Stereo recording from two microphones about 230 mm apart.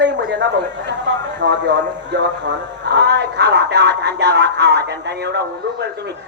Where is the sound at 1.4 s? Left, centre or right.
Right.